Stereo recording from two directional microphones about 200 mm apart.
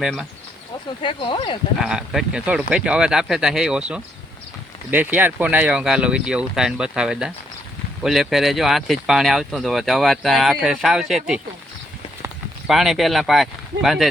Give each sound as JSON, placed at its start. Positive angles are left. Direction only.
{"t": 0.0, "sound": "speech", "side_deg": 0}
{"t": 1.0, "sound": "speech", "side_deg": 25}
{"t": 1.8, "sound": "speech", "side_deg": -5}
{"t": 12.6, "sound": "speech", "side_deg": 0}